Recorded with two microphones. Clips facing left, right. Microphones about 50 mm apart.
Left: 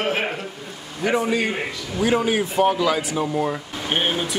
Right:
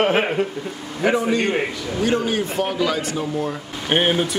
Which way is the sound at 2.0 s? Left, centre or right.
Centre.